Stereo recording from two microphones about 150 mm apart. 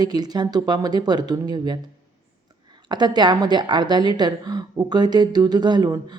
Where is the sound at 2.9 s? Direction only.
30° right (ahead or behind).